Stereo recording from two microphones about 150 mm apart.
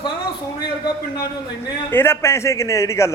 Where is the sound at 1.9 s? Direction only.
15° left (ahead or behind).